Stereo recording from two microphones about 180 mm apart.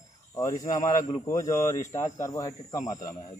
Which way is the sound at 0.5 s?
45° left (ahead or behind).